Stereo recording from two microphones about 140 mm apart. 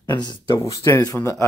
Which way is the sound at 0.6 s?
20° left (ahead or behind).